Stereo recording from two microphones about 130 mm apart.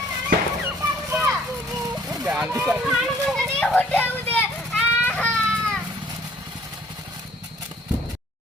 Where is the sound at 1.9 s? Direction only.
30° right (ahead or behind).